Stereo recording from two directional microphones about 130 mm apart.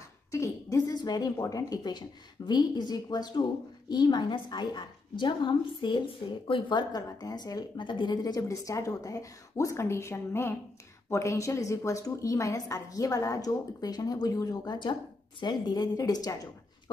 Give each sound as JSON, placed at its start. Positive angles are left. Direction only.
{"t": 0.3, "sound": "a woman's voice", "side_deg": 25}